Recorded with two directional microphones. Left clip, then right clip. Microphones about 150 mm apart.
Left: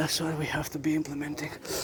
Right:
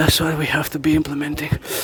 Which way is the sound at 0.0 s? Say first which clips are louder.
Right 12 dB; 55° right (ahead or behind).